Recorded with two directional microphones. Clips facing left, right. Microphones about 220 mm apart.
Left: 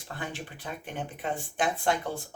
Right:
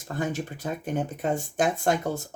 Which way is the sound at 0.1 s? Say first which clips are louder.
Right 8 dB; 40° right (ahead or behind).